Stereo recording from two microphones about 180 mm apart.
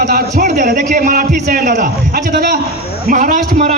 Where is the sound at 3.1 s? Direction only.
50° right (ahead or behind).